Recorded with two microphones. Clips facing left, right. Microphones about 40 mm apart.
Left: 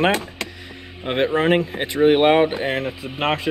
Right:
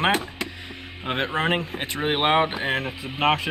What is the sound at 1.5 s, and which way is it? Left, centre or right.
Speech, centre.